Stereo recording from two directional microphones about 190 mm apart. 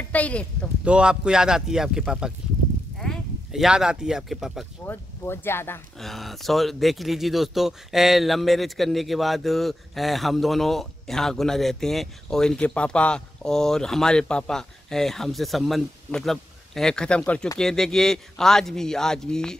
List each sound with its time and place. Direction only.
0.1 s speech: 5° left (ahead or behind)
0.8 s speech: 5° right (ahead or behind)
4.8 s speech: 10° left (ahead or behind)
5.9 s speech: centre (ahead or behind)